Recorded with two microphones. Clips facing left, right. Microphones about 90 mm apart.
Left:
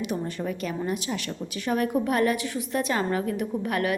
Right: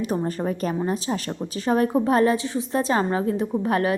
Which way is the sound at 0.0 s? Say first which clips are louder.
Right 5 dB; 40° right (ahead or behind).